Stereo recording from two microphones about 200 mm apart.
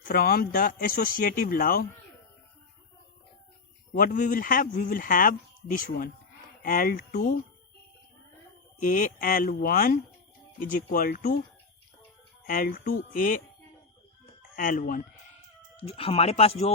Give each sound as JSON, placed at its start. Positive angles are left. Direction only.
{"t": 0.1, "sound": "speech", "side_deg": 50}
{"t": 3.9, "sound": "speech", "side_deg": 40}
{"t": 8.8, "sound": "speech", "side_deg": 40}
{"t": 12.5, "sound": "speech", "side_deg": 45}
{"t": 14.5, "sound": "speech", "side_deg": 45}
{"t": 15.8, "sound": "speech", "side_deg": 30}